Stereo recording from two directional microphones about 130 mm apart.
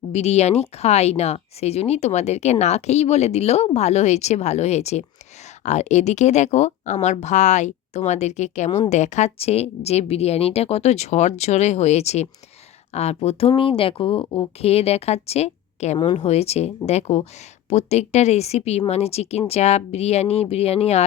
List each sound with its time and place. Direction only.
0.1 s a woman's voice: 55° left (ahead or behind)